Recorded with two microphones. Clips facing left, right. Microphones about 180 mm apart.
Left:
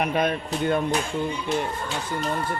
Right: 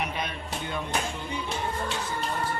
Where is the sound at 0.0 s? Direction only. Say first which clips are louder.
Left 9 dB; 55° left (ahead or behind).